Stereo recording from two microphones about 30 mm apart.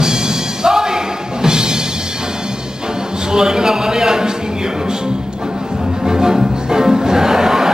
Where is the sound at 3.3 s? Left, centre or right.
Right.